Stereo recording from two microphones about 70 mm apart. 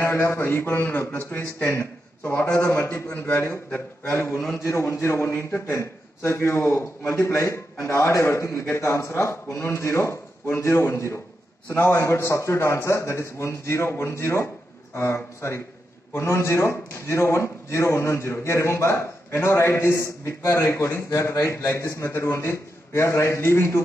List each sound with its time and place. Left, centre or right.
0.0 s a man's voice: left